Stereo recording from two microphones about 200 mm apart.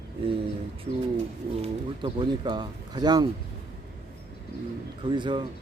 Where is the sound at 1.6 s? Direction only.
25° right (ahead or behind).